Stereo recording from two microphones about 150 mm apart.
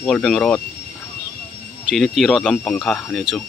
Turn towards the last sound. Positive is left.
turn(degrees=5)  # may be behind; listen again after turning